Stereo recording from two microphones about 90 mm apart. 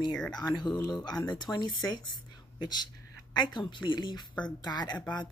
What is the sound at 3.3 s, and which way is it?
A woman's voice, 55° left (ahead or behind).